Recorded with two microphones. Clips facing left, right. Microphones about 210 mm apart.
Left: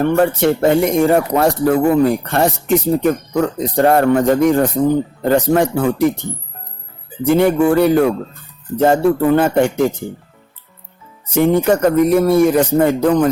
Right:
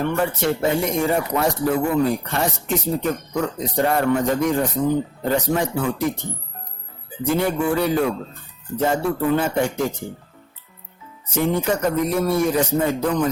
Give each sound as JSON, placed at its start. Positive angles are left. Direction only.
{"t": 0.0, "sound": "speech", "side_deg": 60}
{"t": 7.3, "sound": "speech", "side_deg": 65}
{"t": 11.3, "sound": "speech", "side_deg": 65}